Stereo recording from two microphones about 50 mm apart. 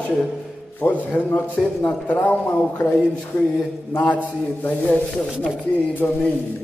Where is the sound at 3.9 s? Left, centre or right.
Left.